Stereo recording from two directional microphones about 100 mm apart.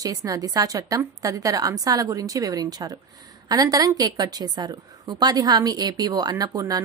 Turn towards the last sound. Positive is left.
turn(degrees=-35)  # may be behind; listen again after turning